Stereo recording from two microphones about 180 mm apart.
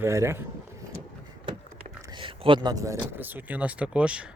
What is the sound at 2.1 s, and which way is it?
Speech, 25° right (ahead or behind).